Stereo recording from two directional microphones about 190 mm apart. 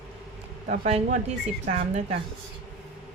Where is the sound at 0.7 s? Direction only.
40° right (ahead or behind).